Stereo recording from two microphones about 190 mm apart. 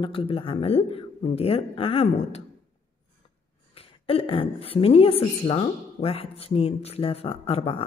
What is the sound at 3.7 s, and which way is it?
A woman's voice, 30° left (ahead or behind).